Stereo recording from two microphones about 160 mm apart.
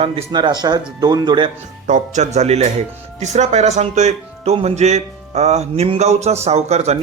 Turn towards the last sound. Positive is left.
turn(degrees=-40)  # may be behind; listen again after turning